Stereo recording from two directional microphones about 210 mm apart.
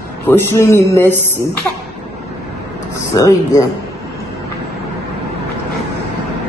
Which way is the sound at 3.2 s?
15° left (ahead or behind).